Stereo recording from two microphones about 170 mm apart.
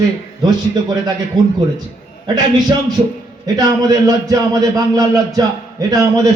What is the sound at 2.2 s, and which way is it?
A man's voice, 25° right (ahead or behind).